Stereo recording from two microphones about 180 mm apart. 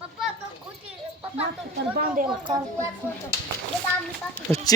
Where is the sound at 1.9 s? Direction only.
55° right (ahead or behind).